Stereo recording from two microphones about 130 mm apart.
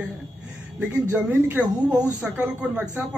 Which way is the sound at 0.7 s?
15° right (ahead or behind).